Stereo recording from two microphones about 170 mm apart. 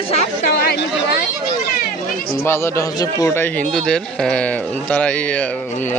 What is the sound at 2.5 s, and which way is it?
Speech, 15° left (ahead or behind).